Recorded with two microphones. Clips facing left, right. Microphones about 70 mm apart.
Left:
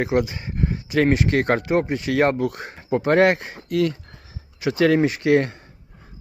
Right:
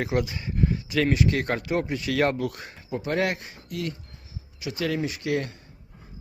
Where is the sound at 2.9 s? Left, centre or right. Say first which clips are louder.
Left 9 dB; left.